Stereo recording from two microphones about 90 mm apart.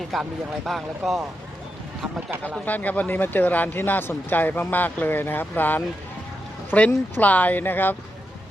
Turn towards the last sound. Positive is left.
turn(degrees=20)  # may be behind; listen again after turning